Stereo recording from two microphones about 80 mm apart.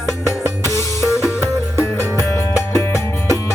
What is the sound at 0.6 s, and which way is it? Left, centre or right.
Music, left.